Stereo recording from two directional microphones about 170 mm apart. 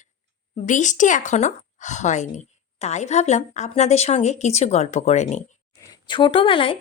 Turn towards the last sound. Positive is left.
turn(degrees=30)  # may be behind; listen again after turning